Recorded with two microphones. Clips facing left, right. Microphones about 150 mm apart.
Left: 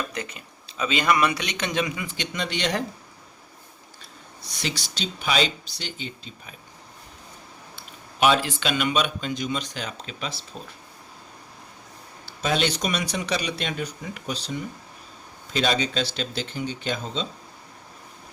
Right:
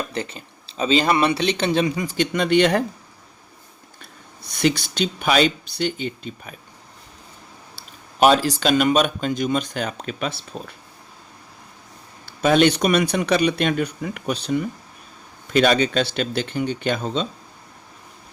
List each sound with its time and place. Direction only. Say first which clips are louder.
0.1 s speech: right 5 dB; 30° right (ahead or behind); by 2.8 s 55° right (ahead or behind)
4.0 s speech: right 1 dB; 55° right (ahead or behind)
7.8 s speech: right 6 dB; 40° right (ahead or behind); by 10.4 s 60° right (ahead or behind)
12.2 s speech: right 9 dB; 55° right (ahead or behind)